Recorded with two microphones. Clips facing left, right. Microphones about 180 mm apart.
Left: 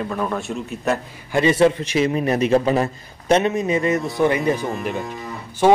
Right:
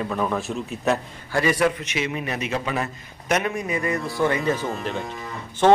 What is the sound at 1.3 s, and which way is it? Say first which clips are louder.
A man's voice: left 5 dB; 25° left (ahead or behind).